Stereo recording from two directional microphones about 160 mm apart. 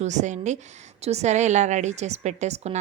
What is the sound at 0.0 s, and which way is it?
A woman's voice, 50° right (ahead or behind).